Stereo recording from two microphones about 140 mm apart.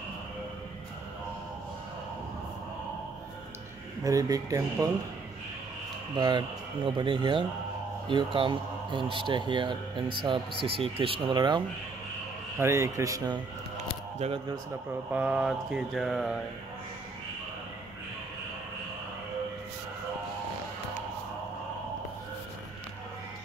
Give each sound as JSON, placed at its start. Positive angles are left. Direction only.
{"t": 4.0, "sound": "speech", "side_deg": -25}
{"t": 6.1, "sound": "speech", "side_deg": -30}
{"t": 12.5, "sound": "speech", "side_deg": -20}
{"t": 14.1, "sound": "speech", "side_deg": -50}
{"t": 15.0, "sound": "mantra", "side_deg": -10}